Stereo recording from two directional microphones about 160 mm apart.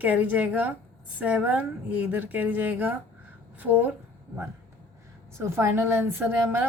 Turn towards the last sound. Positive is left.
turn(degrees=-15)  # may be behind; listen again after turning